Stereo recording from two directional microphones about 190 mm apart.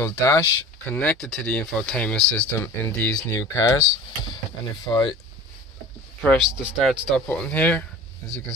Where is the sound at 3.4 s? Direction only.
20° left (ahead or behind).